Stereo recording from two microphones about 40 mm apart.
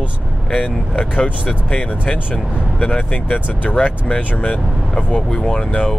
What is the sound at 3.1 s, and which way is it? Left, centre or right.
Speech, left.